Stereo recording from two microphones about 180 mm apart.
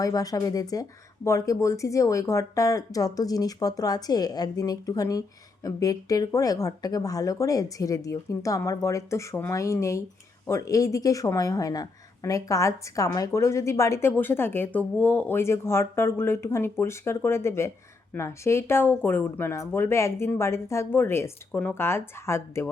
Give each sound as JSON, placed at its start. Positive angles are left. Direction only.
{"t": 0.0, "sound": "a woman's voice", "side_deg": 20}